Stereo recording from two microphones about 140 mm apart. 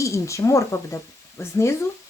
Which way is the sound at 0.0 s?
20° left (ahead or behind).